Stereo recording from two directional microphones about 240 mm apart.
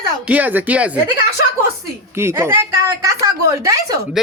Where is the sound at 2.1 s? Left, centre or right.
Centre.